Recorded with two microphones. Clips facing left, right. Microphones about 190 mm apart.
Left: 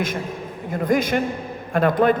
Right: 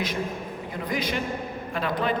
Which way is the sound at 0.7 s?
50° left (ahead or behind).